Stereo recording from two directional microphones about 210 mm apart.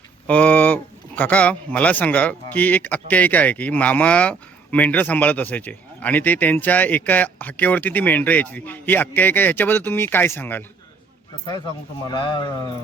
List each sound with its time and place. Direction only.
0.3 s speech: 5° left (ahead or behind)
12.0 s speech: 20° left (ahead or behind)